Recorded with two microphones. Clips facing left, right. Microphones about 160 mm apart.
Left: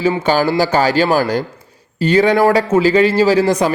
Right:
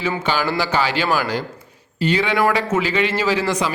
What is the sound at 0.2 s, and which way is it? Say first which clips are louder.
A man's voice: left 7 dB; 40° left (ahead or behind).